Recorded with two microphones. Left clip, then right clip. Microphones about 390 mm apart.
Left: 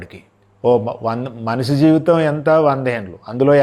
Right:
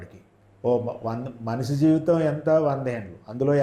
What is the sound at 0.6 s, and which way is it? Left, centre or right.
Speech, left.